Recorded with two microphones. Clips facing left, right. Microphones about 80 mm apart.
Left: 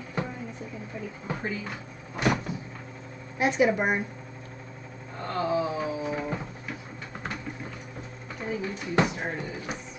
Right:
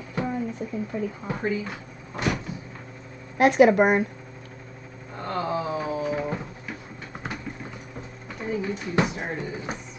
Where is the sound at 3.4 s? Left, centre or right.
Right.